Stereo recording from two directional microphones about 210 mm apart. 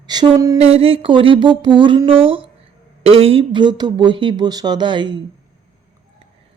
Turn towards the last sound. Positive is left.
turn(degrees=-20)  # may be behind; listen again after turning